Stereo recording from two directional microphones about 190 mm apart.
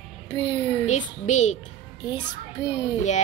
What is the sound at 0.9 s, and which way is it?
Speech, 40° left (ahead or behind).